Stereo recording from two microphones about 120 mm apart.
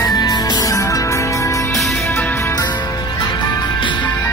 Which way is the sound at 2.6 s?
40° left (ahead or behind).